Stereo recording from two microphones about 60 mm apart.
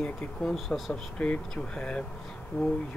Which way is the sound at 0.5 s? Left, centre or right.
Centre.